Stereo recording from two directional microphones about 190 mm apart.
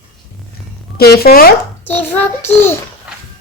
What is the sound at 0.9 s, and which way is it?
Speech, 55° left (ahead or behind).